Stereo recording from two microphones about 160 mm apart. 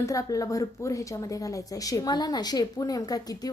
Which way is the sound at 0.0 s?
20° left (ahead or behind).